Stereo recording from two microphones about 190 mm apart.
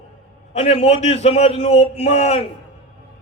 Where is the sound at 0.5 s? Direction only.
35° left (ahead or behind).